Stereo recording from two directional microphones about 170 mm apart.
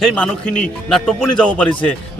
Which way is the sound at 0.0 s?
5° left (ahead or behind).